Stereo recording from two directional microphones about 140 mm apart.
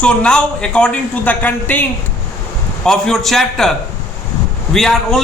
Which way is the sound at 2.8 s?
5° left (ahead or behind).